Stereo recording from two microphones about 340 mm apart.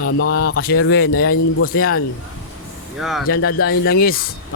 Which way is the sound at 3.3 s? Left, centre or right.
Left.